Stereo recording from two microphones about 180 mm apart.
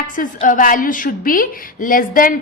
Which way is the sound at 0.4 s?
50° left (ahead or behind).